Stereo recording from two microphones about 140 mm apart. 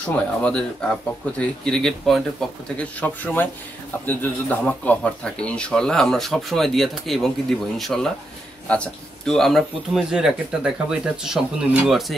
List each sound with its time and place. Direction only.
0.0 s speech: 10° left (ahead or behind)